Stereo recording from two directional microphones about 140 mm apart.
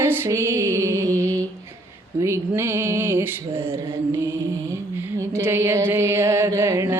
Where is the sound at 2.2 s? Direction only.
20° right (ahead or behind).